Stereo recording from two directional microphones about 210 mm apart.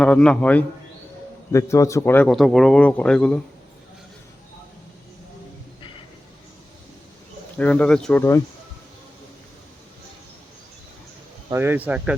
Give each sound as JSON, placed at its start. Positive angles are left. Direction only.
{"t": 0.0, "sound": "a man's voice", "side_deg": 5}
{"t": 7.6, "sound": "a man's voice", "side_deg": 5}
{"t": 11.5, "sound": "speech", "side_deg": -10}